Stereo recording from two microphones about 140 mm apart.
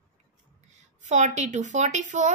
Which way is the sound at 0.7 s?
60° right (ahead or behind).